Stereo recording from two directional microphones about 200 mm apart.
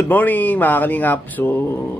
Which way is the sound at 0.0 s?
10° left (ahead or behind).